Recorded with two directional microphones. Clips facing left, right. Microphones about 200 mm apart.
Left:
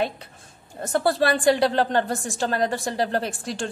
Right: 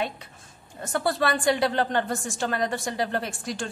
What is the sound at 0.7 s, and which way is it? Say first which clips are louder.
A woman's voice: left 4 dB; 35° left (ahead or behind).